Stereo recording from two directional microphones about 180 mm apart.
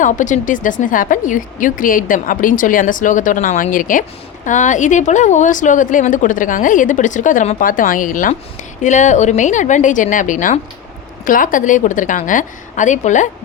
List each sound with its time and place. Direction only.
0.0 s speech: 45° left (ahead or behind)